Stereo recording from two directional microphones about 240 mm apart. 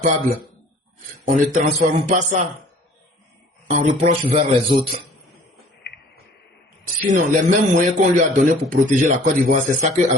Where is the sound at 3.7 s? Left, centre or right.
Right.